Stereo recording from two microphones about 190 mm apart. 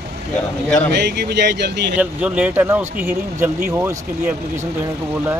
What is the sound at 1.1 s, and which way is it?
Speech, 60° right (ahead or behind).